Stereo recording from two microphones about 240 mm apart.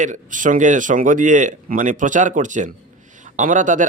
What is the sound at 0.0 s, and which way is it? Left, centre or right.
Speech, right.